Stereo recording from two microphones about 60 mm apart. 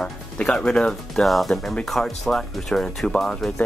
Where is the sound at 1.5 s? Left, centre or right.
Centre.